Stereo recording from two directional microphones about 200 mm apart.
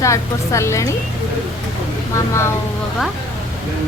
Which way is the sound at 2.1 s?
15° left (ahead or behind).